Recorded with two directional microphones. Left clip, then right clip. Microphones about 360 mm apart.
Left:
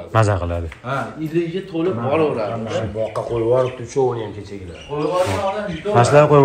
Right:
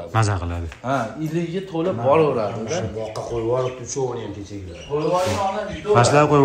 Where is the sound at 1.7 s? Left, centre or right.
Right.